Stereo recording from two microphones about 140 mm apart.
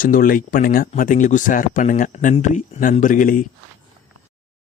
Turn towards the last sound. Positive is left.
turn(degrees=70)  # may be behind; listen again after turning